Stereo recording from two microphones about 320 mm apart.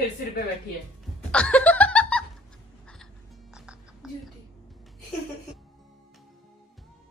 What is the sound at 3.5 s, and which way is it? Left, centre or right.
Music, centre.